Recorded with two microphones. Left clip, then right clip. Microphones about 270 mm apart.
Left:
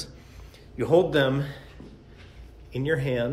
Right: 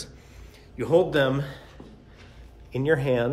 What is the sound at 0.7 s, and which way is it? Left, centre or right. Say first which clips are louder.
Speech: even; centre.